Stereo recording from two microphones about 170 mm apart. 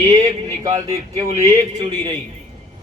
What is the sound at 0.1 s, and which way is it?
Speech, 40° right (ahead or behind).